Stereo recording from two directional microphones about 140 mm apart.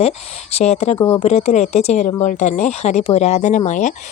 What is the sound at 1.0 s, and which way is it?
Speech, 15° left (ahead or behind).